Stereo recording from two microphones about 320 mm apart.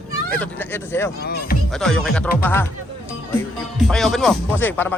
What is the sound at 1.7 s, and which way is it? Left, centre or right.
Speech, centre.